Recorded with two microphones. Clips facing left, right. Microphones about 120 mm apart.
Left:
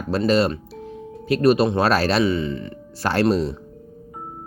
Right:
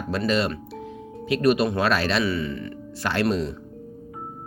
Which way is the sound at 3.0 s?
35° left (ahead or behind).